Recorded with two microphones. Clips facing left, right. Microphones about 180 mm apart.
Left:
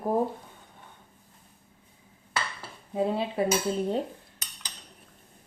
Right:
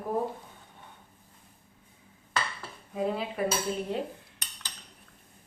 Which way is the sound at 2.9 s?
25° left (ahead or behind).